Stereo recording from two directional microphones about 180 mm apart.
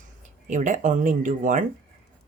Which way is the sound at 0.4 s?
45° right (ahead or behind).